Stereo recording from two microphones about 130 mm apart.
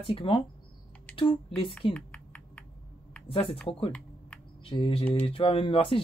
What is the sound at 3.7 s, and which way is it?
Speech, 45° left (ahead or behind).